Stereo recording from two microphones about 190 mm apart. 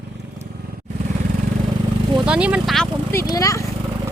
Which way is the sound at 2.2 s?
5° right (ahead or behind).